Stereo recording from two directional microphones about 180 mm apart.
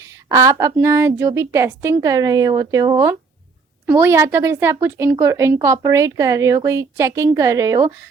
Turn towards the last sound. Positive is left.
turn(degrees=-20)  # may be behind; listen again after turning